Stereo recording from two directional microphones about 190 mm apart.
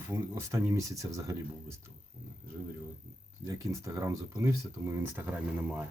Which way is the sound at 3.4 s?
15° right (ahead or behind).